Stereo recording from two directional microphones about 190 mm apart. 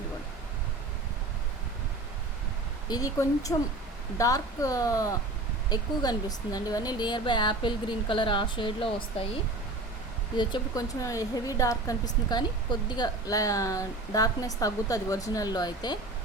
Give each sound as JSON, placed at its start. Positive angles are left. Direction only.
{"t": 2.9, "sound": "a woman's voice", "side_deg": 20}